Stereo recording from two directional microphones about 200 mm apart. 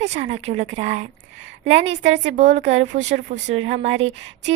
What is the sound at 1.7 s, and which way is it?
Speech, 65° right (ahead or behind).